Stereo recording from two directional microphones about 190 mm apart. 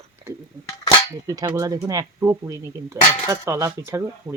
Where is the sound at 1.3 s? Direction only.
15° right (ahead or behind).